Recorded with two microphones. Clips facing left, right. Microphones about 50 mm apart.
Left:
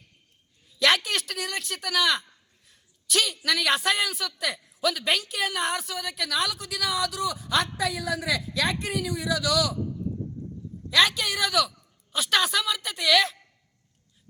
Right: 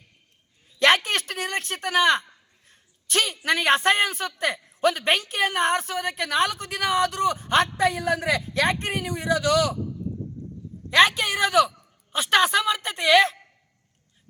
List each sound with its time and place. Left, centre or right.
0.7 s speech: right
2.6 s a sound: right
3.4 s a woman's voice: right
10.8 s a woman's voice: right